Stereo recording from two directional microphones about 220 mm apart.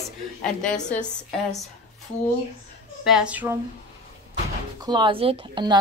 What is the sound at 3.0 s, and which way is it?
Speech, 5° right (ahead or behind).